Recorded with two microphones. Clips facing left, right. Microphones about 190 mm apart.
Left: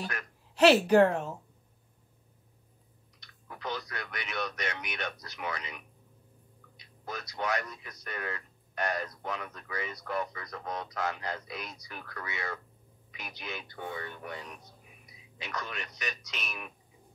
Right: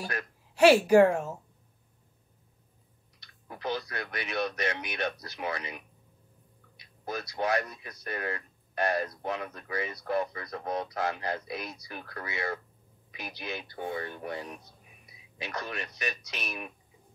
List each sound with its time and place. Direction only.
0.6 s speech: 10° right (ahead or behind)
3.2 s speech: 30° right (ahead or behind)
7.1 s speech: 30° right (ahead or behind)